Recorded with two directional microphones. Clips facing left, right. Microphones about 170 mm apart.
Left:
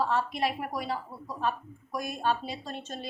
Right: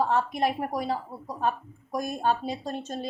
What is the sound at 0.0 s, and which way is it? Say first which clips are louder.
A woman's voice: right 3 dB; 50° right (ahead or behind).